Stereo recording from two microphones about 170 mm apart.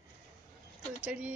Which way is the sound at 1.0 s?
5° right (ahead or behind).